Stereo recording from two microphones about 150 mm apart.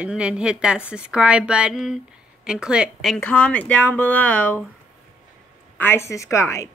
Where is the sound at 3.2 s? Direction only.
10° left (ahead or behind).